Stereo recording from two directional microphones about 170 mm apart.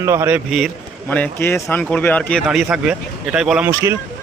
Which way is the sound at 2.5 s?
5° right (ahead or behind).